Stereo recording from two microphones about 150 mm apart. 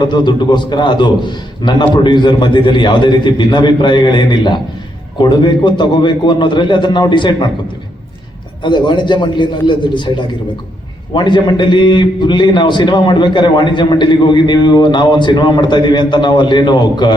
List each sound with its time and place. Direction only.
0.0 s a man's voice: 30° left (ahead or behind)
8.6 s a man's voice: 30° left (ahead or behind)